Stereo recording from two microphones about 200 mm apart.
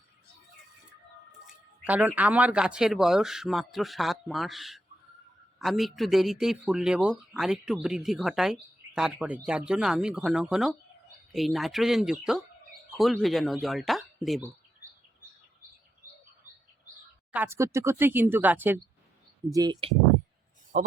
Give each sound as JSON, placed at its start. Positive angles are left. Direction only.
{"t": 1.8, "sound": "speech", "side_deg": -5}
{"t": 17.3, "sound": "speech", "side_deg": -10}
{"t": 19.5, "sound": "speech", "side_deg": -20}
{"t": 20.7, "sound": "speech", "side_deg": -40}